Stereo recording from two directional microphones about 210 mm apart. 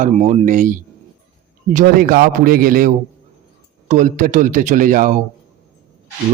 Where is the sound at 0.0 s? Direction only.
35° right (ahead or behind).